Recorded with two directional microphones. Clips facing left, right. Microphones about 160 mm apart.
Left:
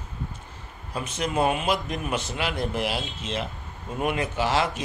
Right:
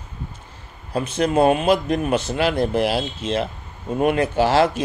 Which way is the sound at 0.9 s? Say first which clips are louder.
Right 8 dB; 30° right (ahead or behind).